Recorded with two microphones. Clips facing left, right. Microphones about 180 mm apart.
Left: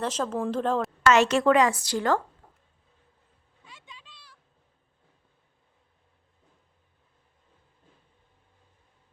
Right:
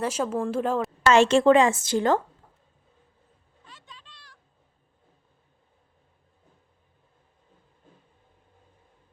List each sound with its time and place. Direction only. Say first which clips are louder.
0.0 s speech: right 2 dB; 10° right (ahead or behind)
1.0 s a woman's voice: right 3 dB; 30° right (ahead or behind)
3.6 s a sound: even; 10° left (ahead or behind)